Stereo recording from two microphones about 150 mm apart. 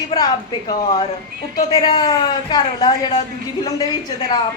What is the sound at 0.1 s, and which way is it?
Speech, 40° left (ahead or behind).